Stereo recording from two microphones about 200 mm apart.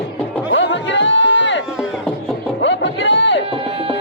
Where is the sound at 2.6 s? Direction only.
65° left (ahead or behind).